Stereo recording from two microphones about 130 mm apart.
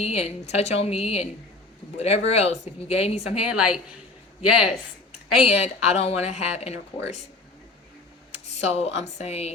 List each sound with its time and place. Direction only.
0.0 s speech: 55° left (ahead or behind)
3.4 s a woman's voice: 5° right (ahead or behind)
5.5 s speech: 55° left (ahead or behind)
8.3 s speech: 55° left (ahead or behind)